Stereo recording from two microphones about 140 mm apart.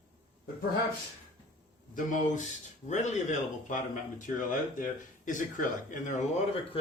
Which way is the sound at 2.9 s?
60° left (ahead or behind).